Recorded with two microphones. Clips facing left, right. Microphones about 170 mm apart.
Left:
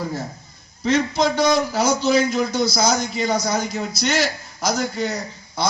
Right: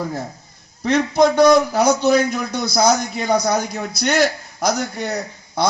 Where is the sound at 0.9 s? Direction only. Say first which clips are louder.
Right 4 dB; 55° right (ahead or behind).